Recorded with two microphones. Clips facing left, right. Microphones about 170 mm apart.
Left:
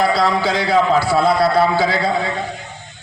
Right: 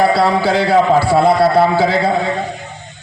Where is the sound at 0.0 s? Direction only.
30° right (ahead or behind).